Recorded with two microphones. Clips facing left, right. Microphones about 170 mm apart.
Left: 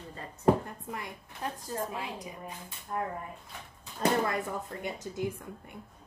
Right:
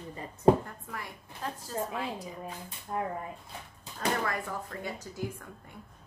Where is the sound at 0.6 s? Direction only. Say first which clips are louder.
Left 2 dB; 20° left (ahead or behind).